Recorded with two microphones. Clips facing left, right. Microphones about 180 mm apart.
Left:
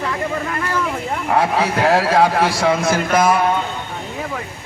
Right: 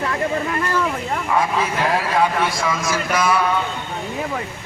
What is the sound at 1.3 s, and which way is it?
A man's voice, 70° left (ahead or behind).